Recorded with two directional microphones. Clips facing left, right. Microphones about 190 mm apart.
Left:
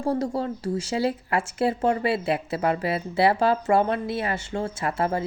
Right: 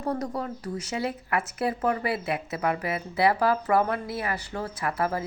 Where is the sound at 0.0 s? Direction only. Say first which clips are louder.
Left 4 dB; 30° left (ahead or behind).